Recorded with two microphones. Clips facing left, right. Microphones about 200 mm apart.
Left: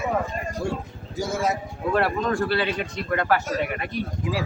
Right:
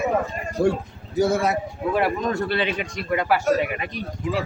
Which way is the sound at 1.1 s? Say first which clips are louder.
Right 5 dB; 60° right (ahead or behind).